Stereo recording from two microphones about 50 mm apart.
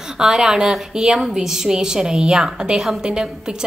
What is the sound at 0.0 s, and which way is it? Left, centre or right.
A woman's voice, centre.